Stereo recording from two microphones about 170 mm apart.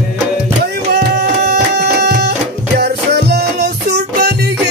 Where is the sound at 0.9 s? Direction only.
75° right (ahead or behind).